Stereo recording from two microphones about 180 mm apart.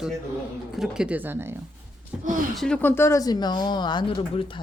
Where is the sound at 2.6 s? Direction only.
10° left (ahead or behind); by 4.1 s 25° left (ahead or behind).